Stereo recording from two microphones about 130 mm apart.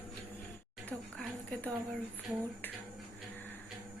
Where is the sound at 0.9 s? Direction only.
10° left (ahead or behind).